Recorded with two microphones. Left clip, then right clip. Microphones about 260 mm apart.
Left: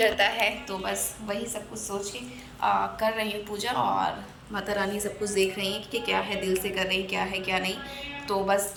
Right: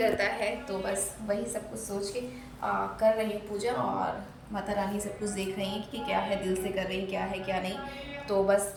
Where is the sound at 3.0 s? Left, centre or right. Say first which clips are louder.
Right 1 dB; centre.